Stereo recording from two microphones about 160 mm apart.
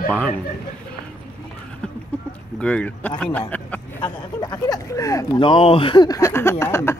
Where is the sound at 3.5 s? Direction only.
10° left (ahead or behind).